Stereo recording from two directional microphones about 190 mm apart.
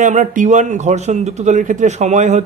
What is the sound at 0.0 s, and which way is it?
A man's voice, 40° right (ahead or behind).